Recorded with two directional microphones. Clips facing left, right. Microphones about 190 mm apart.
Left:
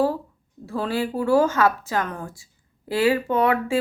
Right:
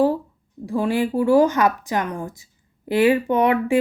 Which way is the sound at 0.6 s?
15° right (ahead or behind).